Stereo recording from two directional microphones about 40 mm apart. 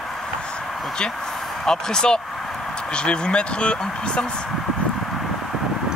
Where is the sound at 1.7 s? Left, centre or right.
Centre.